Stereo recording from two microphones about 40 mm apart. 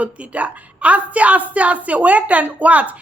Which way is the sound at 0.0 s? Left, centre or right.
Right.